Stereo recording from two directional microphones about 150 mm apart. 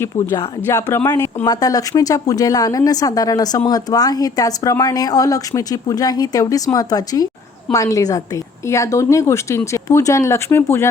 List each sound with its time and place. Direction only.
0.0 s speech: 20° left (ahead or behind)